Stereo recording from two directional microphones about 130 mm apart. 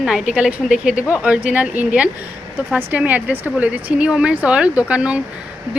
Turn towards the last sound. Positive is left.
turn(degrees=-10)  # may be behind; listen again after turning